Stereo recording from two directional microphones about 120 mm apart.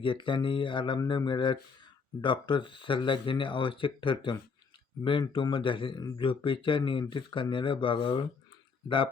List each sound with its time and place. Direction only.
0.0 s speech: 45° left (ahead or behind)